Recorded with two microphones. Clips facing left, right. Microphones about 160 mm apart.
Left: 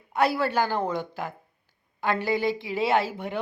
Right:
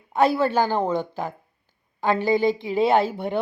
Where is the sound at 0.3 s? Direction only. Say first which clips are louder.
Right 4 dB; 25° right (ahead or behind).